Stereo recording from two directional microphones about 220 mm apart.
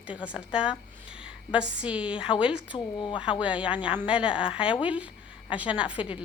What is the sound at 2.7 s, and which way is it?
Speech, 20° left (ahead or behind).